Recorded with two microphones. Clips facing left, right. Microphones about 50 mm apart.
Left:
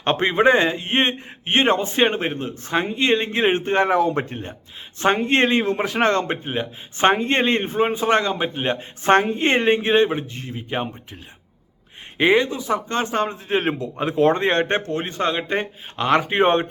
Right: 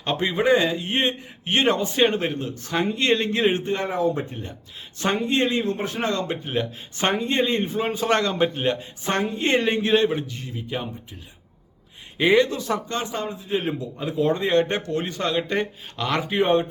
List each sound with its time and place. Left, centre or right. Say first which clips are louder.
0.0 s a man's voice: left 5 dB; left
3.7 s speech: left 5 dB; left
4.9 s a man's voice: left 5 dB; left
5.2 s speech: left 4 dB; left
6.2 s a man's voice: left 1 dB; left
7.3 s speech: left 3 dB; left
7.9 s speech: even; left
8.6 s a man's voice: left 4 dB; left
12.1 s speech: left 1 dB; left
12.9 s speech: left 5 dB; left